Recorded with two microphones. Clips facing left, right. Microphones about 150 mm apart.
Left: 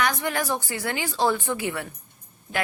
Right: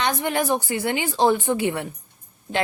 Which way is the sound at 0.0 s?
20° right (ahead or behind).